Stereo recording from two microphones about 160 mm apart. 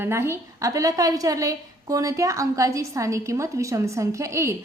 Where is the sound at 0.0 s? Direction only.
15° right (ahead or behind).